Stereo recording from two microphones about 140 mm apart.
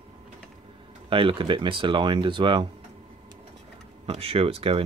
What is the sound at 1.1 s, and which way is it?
Speech, 40° right (ahead or behind).